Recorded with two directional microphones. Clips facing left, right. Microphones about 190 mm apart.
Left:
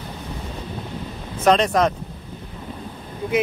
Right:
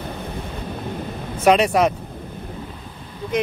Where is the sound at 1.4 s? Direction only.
10° right (ahead or behind).